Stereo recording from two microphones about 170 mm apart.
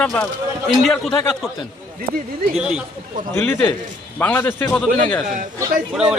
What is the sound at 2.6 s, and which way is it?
Speech, 5° right (ahead or behind).